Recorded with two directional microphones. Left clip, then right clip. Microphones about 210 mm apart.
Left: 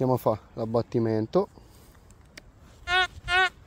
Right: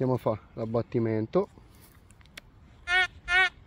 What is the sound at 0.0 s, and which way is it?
Speech, 10° left (ahead or behind).